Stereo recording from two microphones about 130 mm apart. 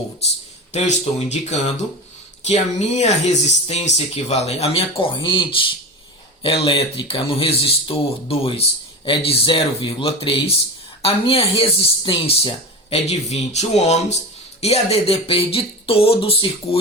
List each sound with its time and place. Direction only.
0.7 s speech: 60° left (ahead or behind); by 16.5 s 45° left (ahead or behind)